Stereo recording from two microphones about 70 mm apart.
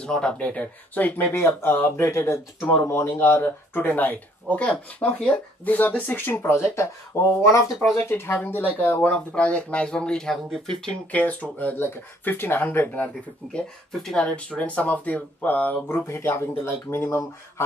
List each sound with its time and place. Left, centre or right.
0.0 s speech: centre
5.7 s speech: left
6.6 s speech: left
8.0 s speech: left
9.1 s speech: centre
10.9 s speech: centre
13.9 s speech: centre; by 15.8 s left
15.9 s speech: left